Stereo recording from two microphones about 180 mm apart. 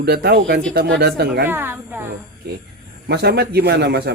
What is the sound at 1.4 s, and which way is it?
Speech, 10° right (ahead or behind).